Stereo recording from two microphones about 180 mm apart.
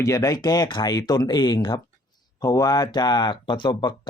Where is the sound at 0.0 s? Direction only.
20° left (ahead or behind).